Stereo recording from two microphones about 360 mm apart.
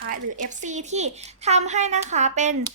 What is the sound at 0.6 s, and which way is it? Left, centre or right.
A child's voice, centre.